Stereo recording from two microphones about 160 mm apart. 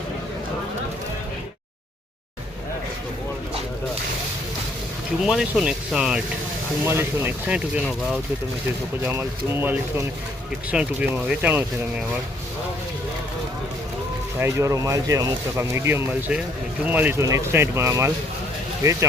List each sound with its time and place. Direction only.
5.2 s speech: 5° right (ahead or behind)
14.3 s speech: 20° right (ahead or behind)